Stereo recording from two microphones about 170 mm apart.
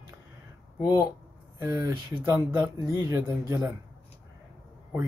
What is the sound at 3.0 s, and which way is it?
Speech, 15° right (ahead or behind).